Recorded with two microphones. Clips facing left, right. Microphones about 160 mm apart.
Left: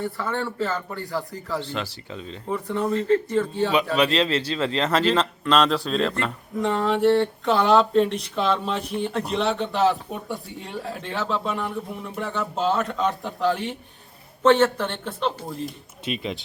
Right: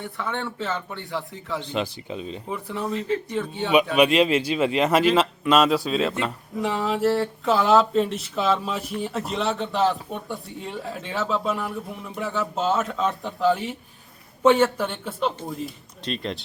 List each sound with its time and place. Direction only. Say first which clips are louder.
0.0 s speech: left 3 dB; 5° left (ahead or behind)
1.6 s speech: right 3 dB; 15° right (ahead or behind)
2.6 s speech: left 5 dB; 5° right (ahead or behind)